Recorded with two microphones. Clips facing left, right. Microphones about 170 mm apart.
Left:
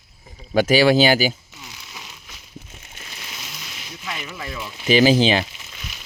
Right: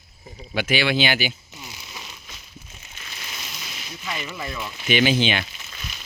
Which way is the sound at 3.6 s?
Centre (ahead or behind).